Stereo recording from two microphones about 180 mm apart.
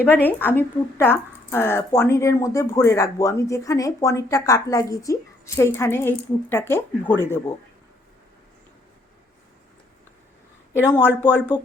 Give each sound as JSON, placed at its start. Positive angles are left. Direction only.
{"t": 0.0, "sound": "speech", "side_deg": 10}
{"t": 10.8, "sound": "speech", "side_deg": 10}